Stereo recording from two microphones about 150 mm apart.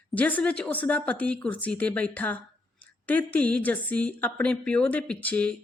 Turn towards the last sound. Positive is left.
turn(degrees=10)  # may be behind; listen again after turning